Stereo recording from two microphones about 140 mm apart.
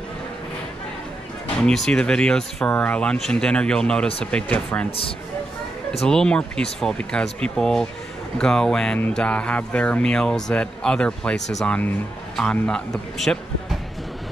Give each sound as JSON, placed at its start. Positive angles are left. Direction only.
{"t": 1.6, "sound": "speech", "side_deg": 5}
{"t": 6.0, "sound": "speech", "side_deg": 5}